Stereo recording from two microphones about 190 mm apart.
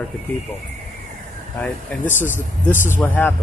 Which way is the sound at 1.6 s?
10° left (ahead or behind).